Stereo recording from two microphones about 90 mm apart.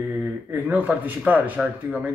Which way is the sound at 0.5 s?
20° right (ahead or behind).